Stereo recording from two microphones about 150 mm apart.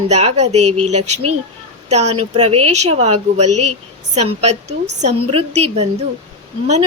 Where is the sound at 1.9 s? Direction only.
50° right (ahead or behind).